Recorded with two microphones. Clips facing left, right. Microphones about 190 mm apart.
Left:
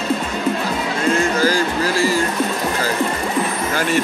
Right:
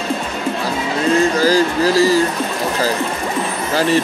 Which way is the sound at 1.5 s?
40° right (ahead or behind).